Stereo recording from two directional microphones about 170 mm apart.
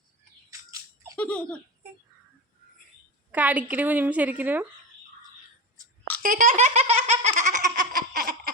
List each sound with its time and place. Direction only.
1.1 s giggle: 5° left (ahead or behind)
3.3 s a woman's voice: 10° right (ahead or behind)
6.2 s laughter: 60° right (ahead or behind)
6.5 s laughter: 40° right (ahead or behind); by 8.5 s 60° right (ahead or behind)